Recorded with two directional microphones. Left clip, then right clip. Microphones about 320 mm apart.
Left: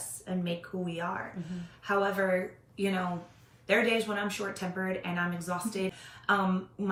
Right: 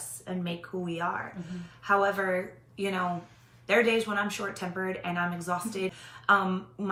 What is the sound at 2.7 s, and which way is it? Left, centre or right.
Speech, centre.